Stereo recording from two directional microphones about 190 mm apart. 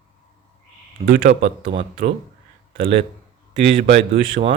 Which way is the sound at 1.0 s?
50° right (ahead or behind).